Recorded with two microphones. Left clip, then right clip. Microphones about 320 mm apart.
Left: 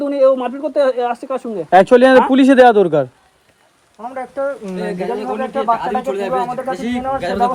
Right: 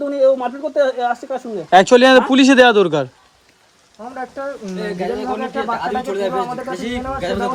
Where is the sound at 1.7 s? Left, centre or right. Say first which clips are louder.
Left 1 dB; centre.